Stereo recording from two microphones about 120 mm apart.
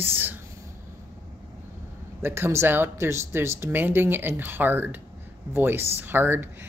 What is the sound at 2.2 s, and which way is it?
Speech, 20° right (ahead or behind).